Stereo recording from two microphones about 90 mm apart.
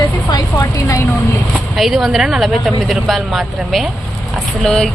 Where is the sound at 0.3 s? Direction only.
40° left (ahead or behind).